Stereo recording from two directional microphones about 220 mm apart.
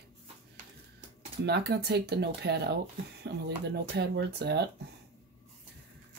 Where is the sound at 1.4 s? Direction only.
50° right (ahead or behind).